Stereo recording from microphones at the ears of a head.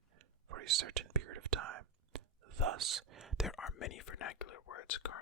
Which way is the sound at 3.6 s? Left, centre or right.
Left.